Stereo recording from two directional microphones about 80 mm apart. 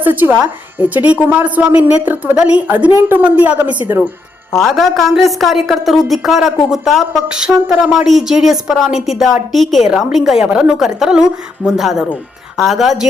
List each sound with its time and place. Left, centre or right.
0.0 s a woman's voice: right
4.5 s a woman's voice: centre
7.3 s a woman's voice: centre